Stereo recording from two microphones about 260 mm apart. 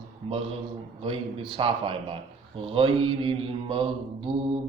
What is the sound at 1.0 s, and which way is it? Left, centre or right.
Mantra, centre.